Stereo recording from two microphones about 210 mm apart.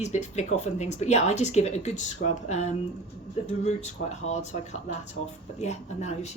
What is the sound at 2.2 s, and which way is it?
Speech, 40° left (ahead or behind).